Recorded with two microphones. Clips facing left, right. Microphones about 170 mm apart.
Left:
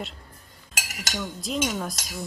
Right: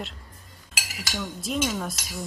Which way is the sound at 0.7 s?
45° left (ahead or behind).